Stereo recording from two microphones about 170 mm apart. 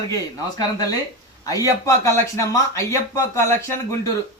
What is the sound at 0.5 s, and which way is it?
Speech, 20° left (ahead or behind).